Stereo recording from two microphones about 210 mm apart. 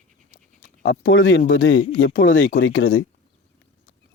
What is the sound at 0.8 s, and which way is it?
Speech, 60° left (ahead or behind).